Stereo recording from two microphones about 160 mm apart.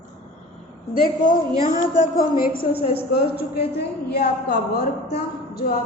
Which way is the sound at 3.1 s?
75° left (ahead or behind).